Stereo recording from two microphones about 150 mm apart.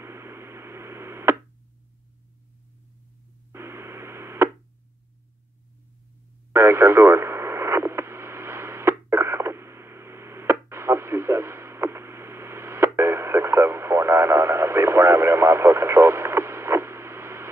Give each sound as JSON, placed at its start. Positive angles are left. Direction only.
{"t": 0.0, "sound": "a sound", "side_deg": -15}
{"t": 3.5, "sound": "radio", "side_deg": -15}
{"t": 6.5, "sound": "radio", "side_deg": -15}